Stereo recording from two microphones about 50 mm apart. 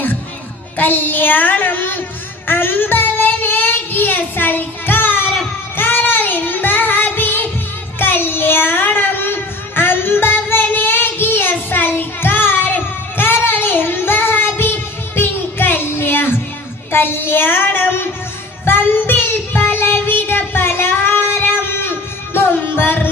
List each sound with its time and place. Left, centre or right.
0.8 s child singing: left